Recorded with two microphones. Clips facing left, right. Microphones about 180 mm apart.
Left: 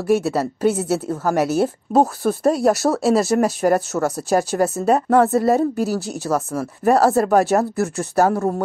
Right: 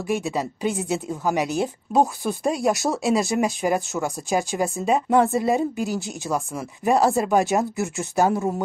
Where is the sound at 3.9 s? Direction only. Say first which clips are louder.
Left 5 dB; 70° left (ahead or behind).